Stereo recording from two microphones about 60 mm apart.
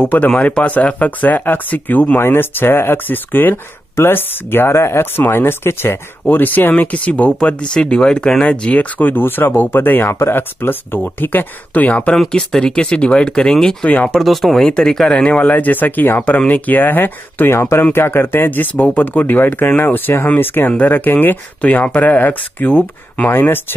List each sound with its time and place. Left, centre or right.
0.0 s speech: left
0.3 s speech: centre; by 5.9 s left
6.2 s speech: left; by 8.5 s centre
8.5 s speech: left
12.3 s speech: centre
14.2 s speech: centre
15.1 s speech: left
17.6 s speech: left
17.9 s speech: left